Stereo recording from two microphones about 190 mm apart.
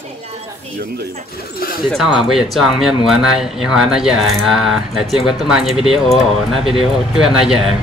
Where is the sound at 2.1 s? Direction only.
Centre (ahead or behind).